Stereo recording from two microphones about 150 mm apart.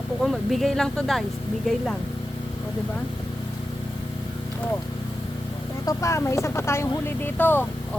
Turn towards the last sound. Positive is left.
turn(degrees=15)  # may be behind; listen again after turning